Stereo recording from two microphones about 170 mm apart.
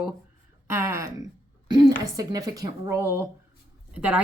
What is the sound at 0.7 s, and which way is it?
A woman's voice, 15° right (ahead or behind).